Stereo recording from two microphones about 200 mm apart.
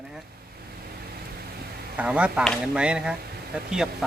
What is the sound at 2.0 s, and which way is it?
Speech, 5° right (ahead or behind).